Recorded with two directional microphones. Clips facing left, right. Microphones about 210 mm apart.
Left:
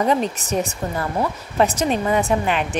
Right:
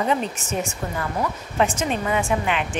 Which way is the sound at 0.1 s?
35° left (ahead or behind).